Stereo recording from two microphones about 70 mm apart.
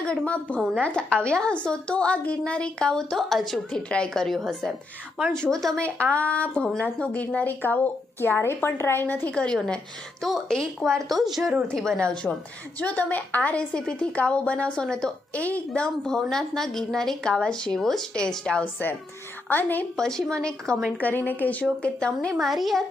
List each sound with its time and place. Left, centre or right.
0.0 s a woman's voice: centre
3.7 s a woman's voice: centre
9.3 s a woman's voice: centre
12.8 s a woman's voice: left; by 18.2 s centre
18.6 s a woman's voice: left
20.0 s a woman's voice: centre
21.0 s a woman's voice: left
22.4 s a woman's voice: centre